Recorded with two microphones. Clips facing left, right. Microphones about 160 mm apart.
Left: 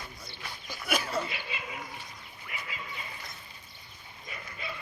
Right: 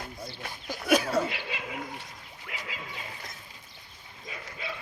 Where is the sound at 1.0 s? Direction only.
80° right.